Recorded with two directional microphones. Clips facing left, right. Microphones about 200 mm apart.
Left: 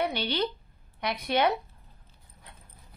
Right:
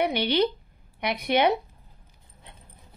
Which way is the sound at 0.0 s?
15° right (ahead or behind).